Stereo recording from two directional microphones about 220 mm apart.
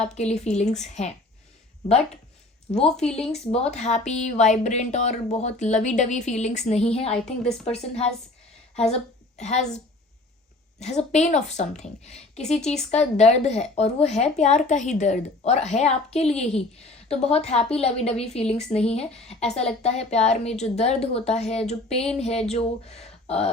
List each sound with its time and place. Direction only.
0.0 s speech: 30° left (ahead or behind)
2.7 s speech: 5° left (ahead or behind)
3.5 s speech: 30° left (ahead or behind)
7.1 s speech: 5° left (ahead or behind)
7.6 s a woman's voice: 30° left (ahead or behind)
12.5 s speech: centre (ahead or behind)
12.7 s a woman's voice: 30° left (ahead or behind)